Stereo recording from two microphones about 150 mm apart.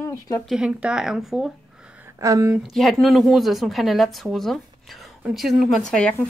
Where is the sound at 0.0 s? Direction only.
20° left (ahead or behind).